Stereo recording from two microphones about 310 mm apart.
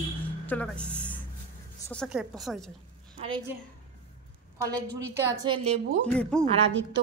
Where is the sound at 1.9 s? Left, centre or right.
Centre.